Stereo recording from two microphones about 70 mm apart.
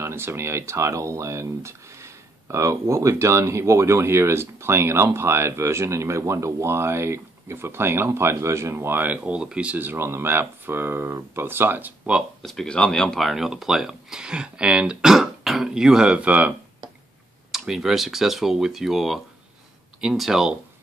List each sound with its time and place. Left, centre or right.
0.0 s speech: right; by 9.8 s centre
9.8 s speech: right
12.4 s speech: centre
13.2 s speech: centre; by 16.5 s right
17.5 s speech: centre